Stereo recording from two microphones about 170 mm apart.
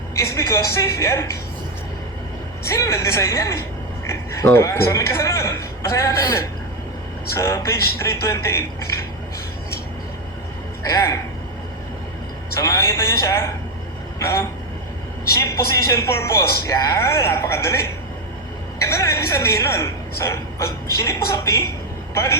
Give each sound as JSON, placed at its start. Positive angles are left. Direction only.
{"t": 0.2, "sound": "a woman's voice", "side_deg": 20}
{"t": 2.6, "sound": "a woman's voice", "side_deg": 20}
{"t": 4.1, "sound": "a sound", "side_deg": 15}
{"t": 4.5, "sound": "a woman's voice", "side_deg": 15}
{"t": 10.8, "sound": "a woman's voice", "side_deg": 20}
{"t": 12.5, "sound": "a woman's voice", "side_deg": 15}